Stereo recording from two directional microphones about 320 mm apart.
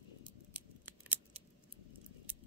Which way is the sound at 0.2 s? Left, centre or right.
Centre.